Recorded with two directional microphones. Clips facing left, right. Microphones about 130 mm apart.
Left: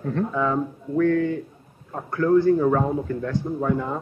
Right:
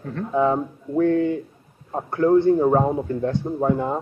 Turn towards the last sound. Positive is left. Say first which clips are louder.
# right 3 dB
turn(degrees=-30)  # may be behind; listen again after turning